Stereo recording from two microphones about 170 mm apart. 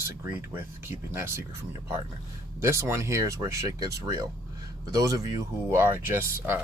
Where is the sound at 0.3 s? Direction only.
10° right (ahead or behind).